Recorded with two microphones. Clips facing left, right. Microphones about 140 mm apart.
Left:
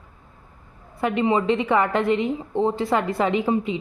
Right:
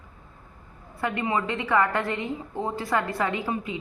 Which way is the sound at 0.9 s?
20° left (ahead or behind).